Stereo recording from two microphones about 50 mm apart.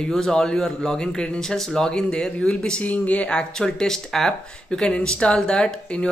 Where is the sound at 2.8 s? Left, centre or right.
Left.